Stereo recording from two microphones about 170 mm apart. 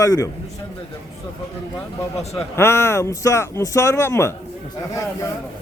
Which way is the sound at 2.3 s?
15° left (ahead or behind).